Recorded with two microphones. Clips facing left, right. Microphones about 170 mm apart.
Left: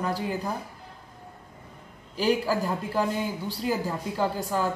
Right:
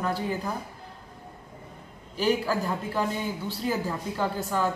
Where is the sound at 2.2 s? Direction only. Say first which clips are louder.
Left 1 dB; 10° left (ahead or behind).